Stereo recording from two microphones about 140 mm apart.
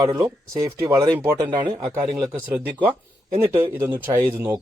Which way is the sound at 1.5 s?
30° right (ahead or behind).